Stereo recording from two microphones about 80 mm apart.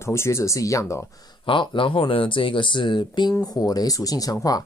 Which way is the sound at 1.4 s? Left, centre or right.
Left.